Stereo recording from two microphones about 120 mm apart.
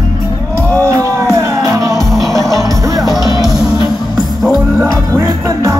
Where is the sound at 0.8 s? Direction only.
25° right (ahead or behind).